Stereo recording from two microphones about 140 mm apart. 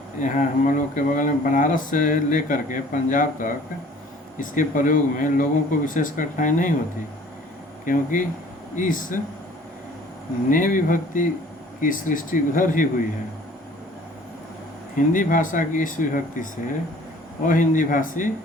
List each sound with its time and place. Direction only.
0.2 s speech: 65° left (ahead or behind)
7.9 s speech: 70° left (ahead or behind)
10.5 s speech: 75° left (ahead or behind)
14.9 s speech: 70° left (ahead or behind)